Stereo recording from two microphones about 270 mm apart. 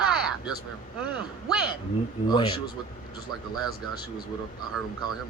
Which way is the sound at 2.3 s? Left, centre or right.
Centre.